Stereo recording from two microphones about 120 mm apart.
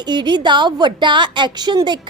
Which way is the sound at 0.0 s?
40° right (ahead or behind).